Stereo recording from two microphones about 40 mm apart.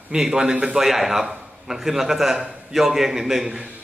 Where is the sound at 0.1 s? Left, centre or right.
Right.